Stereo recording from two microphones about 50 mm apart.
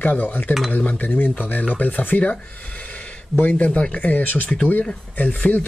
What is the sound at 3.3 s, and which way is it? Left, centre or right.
Speech, left.